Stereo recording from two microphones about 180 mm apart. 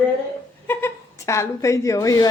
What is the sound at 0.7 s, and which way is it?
A woman's voice, 15° left (ahead or behind).